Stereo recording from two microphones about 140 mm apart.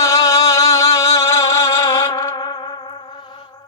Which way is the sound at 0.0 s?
25° left (ahead or behind).